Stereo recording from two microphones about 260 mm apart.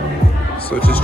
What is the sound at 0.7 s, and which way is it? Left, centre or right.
Music, centre.